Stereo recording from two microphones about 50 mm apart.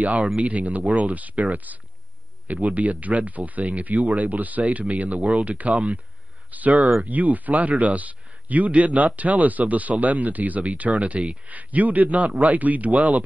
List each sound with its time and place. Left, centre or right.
0.0 s speech: right